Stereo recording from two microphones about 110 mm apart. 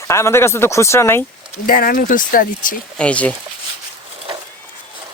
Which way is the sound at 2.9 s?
10° left (ahead or behind).